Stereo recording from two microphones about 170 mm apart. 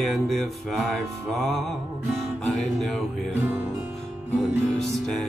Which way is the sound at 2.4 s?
5° left (ahead or behind).